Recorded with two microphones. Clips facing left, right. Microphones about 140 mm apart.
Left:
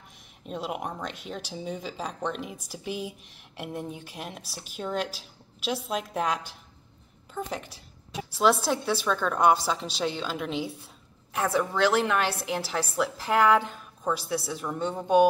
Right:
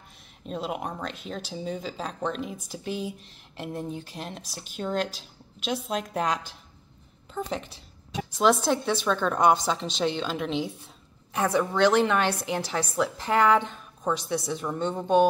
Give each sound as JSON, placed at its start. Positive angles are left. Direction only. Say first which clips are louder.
{"t": 0.5, "sound": "a woman's voice", "louder": "right 1 dB", "side_deg": 5}